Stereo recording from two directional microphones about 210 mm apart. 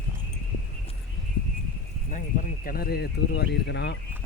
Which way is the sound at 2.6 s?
45° left (ahead or behind).